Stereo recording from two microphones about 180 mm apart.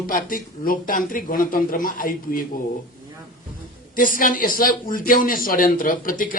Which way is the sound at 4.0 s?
50° left (ahead or behind).